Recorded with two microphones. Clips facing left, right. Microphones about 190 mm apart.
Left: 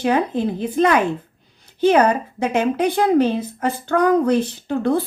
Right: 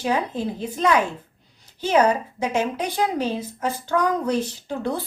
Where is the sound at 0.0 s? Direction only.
60° left (ahead or behind).